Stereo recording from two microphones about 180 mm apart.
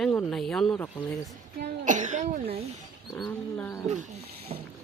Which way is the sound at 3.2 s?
10° left (ahead or behind).